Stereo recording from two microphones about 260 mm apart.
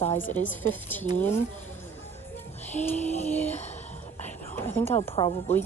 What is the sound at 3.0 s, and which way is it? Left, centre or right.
Speech, left.